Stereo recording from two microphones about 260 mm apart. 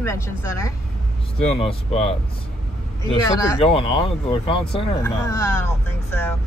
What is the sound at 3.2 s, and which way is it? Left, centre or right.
Speech, centre.